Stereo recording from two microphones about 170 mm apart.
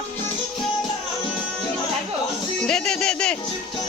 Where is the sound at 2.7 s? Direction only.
5° left (ahead or behind).